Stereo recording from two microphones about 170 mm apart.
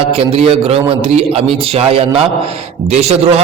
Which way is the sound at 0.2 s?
35° right (ahead or behind).